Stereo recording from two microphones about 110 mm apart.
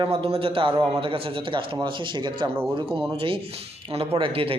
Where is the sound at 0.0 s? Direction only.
55° right (ahead or behind).